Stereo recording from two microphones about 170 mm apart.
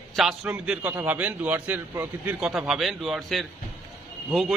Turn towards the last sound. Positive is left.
turn(degrees=0)  # may be behind; listen again after turning